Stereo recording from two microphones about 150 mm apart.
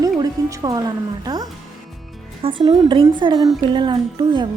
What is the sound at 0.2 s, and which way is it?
A woman's voice, 25° right (ahead or behind).